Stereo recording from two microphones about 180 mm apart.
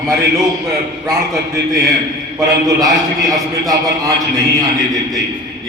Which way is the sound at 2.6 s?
20° right (ahead or behind).